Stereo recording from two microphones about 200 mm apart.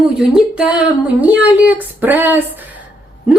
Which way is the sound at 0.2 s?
5° right (ahead or behind).